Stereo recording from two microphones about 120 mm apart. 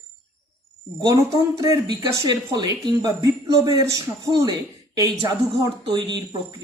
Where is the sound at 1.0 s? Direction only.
30° right (ahead or behind).